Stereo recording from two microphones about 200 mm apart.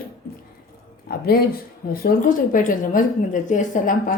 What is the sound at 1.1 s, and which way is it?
Speech, 45° left (ahead or behind).